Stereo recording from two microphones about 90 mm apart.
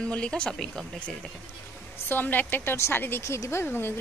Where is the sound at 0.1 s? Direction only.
10° left (ahead or behind).